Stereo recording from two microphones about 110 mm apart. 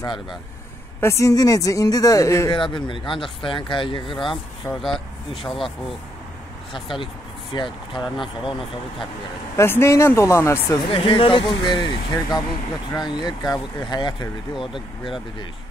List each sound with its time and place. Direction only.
1.0 s speech: 30° left (ahead or behind)
2.5 s speech: 50° left (ahead or behind)
4.8 s speech: centre (ahead or behind)
6.7 s speech: 50° left (ahead or behind)
9.6 s speech: 25° left (ahead or behind)
10.8 s speech: 55° left (ahead or behind)